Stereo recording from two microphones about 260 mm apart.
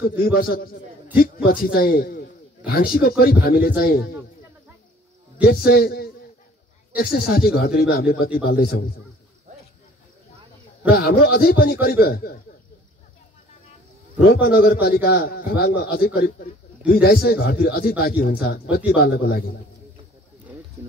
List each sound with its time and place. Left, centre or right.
0.2 s speech: left
5.7 s speech: left
10.9 s speech: left
14.1 s speech: left